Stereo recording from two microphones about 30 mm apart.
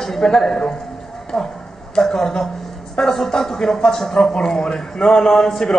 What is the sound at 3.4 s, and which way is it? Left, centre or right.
A man's voice, centre.